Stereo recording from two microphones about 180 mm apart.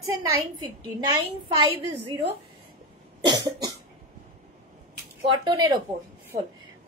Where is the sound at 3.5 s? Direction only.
25° right (ahead or behind).